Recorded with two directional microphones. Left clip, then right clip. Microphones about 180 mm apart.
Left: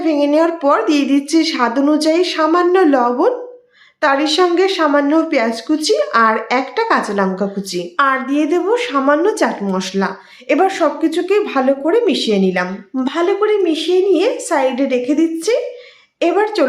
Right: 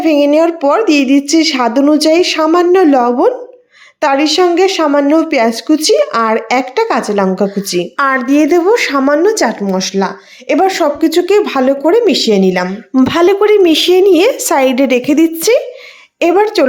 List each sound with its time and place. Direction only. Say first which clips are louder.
0.0 s a woman's voice: right 5 dB; 35° right (ahead or behind); by 15.6 s 50° right (ahead or behind)
16.2 s a woman's voice: right 5 dB; 40° right (ahead or behind)